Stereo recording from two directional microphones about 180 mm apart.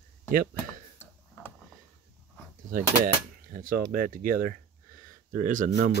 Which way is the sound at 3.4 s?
50° right (ahead or behind).